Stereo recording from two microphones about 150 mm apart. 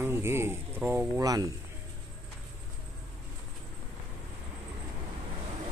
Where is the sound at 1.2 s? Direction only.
25° right (ahead or behind).